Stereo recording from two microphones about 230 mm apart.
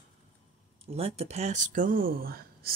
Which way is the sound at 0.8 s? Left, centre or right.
Right.